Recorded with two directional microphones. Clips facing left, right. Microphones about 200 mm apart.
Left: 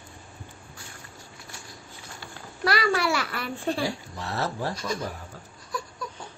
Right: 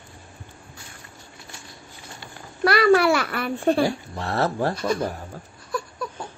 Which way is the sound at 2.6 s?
55° right (ahead or behind).